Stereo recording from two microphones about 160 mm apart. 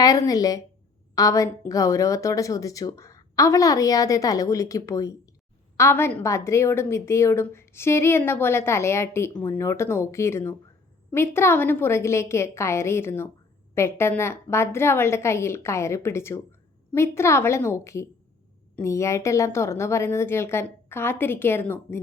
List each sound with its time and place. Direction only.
0.0 s a woman's voice: 20° left (ahead or behind)